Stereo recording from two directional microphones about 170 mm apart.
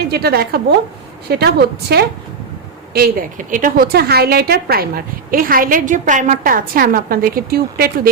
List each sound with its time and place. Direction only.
0.1 s a woman's voice: 65° right (ahead or behind)